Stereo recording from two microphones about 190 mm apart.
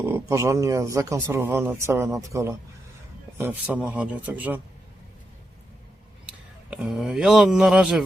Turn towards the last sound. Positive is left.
turn(degrees=-5)  # may be behind; listen again after turning